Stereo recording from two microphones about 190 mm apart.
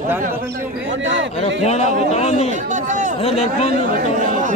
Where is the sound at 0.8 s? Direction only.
75° right (ahead or behind).